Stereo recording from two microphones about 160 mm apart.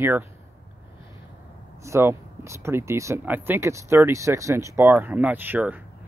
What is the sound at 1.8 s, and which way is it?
Speech, 15° right (ahead or behind).